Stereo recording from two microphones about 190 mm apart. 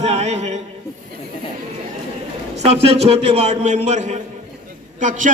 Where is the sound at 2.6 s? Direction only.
35° right (ahead or behind).